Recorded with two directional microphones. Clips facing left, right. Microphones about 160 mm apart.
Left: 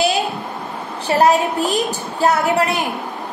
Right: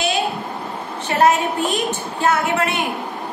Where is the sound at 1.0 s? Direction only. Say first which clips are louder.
Left 2 dB; 35° left (ahead or behind).